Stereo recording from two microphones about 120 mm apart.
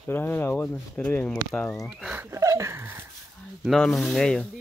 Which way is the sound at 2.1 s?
20° right (ahead or behind).